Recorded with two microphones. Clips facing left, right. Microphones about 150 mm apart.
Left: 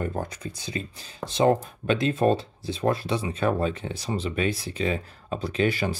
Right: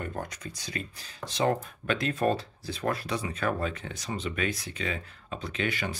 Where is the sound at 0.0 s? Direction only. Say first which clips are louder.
Left 6 dB; 30° left (ahead or behind).